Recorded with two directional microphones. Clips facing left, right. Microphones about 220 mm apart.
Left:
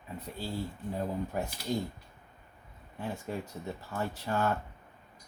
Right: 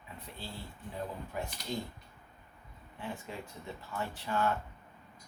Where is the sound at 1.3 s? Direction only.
45° left (ahead or behind).